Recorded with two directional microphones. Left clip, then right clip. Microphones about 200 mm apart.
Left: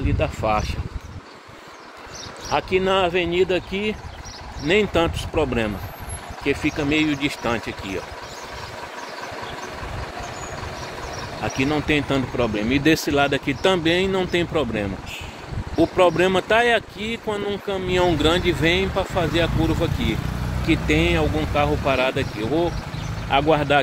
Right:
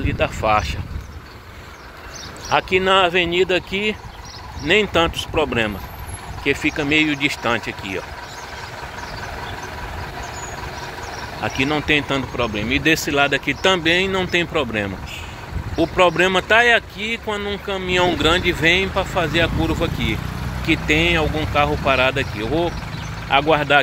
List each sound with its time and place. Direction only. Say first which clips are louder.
0.0 s speech: right 3 dB; 5° right (ahead or behind)
2.5 s speech: right 4 dB; 5° right (ahead or behind)
11.4 s speech: right 3 dB; centre (ahead or behind)
12.5 s speech: right 2 dB; 30° left (ahead or behind)
16.2 s speech: right 3 dB; 15° left (ahead or behind)
23.5 s speech: right 3 dB; 10° left (ahead or behind)